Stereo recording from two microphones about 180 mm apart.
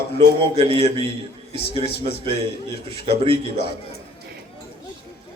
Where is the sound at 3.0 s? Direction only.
30° right (ahead or behind).